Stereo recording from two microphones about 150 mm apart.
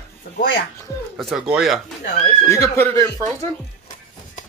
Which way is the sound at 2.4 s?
20° left (ahead or behind).